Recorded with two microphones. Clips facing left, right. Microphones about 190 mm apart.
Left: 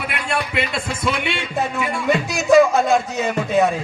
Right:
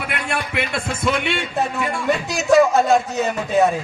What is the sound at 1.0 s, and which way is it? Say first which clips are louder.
Speech: right 2 dB; 20° right (ahead or behind).